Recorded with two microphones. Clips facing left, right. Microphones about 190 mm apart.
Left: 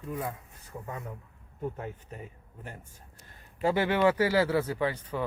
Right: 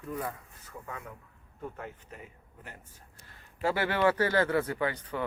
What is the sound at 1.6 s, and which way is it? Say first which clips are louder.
Speech: left 5 dB; 20° left (ahead or behind).